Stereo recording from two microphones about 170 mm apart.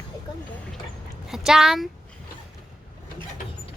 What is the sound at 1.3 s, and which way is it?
Speech, 5° right (ahead or behind).